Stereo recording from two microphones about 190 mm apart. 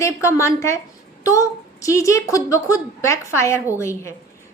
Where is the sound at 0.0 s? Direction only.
15° left (ahead or behind).